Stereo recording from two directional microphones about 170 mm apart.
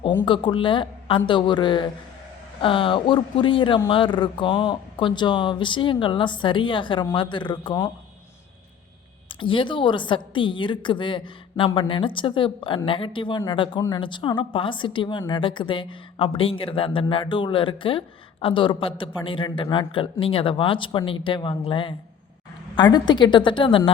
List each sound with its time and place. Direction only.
0.3 s a woman's voice: 30° left (ahead or behind)
9.3 s a woman's voice: 30° left (ahead or behind)